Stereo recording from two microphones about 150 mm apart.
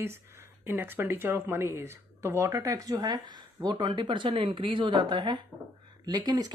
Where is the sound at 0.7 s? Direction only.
15° right (ahead or behind).